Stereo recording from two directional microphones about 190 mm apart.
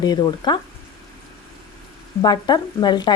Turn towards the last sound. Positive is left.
turn(degrees=20)  # may be behind; listen again after turning